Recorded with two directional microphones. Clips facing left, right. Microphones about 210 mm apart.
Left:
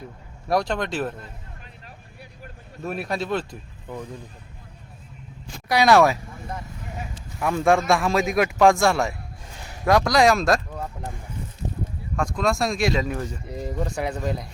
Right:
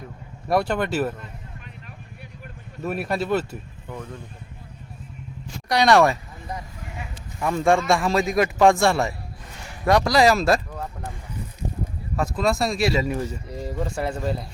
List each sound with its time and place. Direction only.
0.4 s a man's voice: 5° right (ahead or behind)
2.8 s a man's voice: centre (ahead or behind)
3.9 s speech: 20° left (ahead or behind)
5.6 s a man's voice: 5° left (ahead or behind)
12.1 s a man's voice: 5° right (ahead or behind)